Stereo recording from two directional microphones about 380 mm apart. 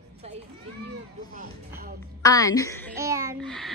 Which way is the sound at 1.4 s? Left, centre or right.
Right.